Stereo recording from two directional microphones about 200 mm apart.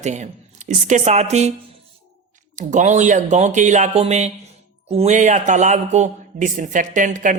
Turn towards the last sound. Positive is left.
turn(degrees=-40)  # may be behind; listen again after turning